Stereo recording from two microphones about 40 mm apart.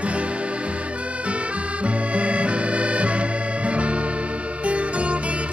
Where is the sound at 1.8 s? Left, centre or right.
Right.